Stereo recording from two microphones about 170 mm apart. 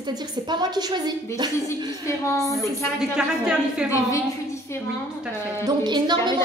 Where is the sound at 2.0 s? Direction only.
15° left (ahead or behind).